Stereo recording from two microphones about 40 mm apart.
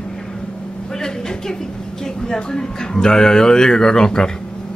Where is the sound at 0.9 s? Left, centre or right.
Centre.